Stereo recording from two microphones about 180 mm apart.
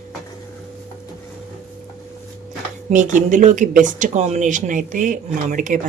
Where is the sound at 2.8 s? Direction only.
45° right (ahead or behind).